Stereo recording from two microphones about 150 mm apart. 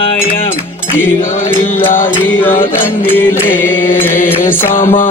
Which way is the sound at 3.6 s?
15° left (ahead or behind).